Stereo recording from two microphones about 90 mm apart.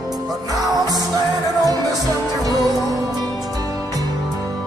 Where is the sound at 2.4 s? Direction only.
40° right (ahead or behind).